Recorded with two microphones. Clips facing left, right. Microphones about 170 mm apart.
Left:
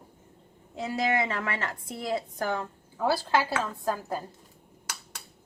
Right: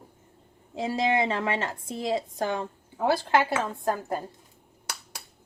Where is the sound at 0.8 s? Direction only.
25° right (ahead or behind).